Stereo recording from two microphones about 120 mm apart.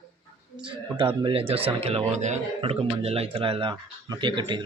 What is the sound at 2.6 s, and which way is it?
Speech, 55° right (ahead or behind).